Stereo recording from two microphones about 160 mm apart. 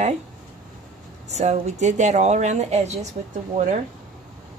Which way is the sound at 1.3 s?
45° right (ahead or behind).